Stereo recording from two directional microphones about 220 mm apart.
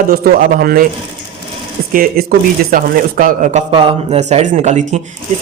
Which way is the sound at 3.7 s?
25° right (ahead or behind).